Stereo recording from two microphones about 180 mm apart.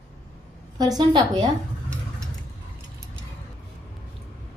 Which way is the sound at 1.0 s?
25° right (ahead or behind).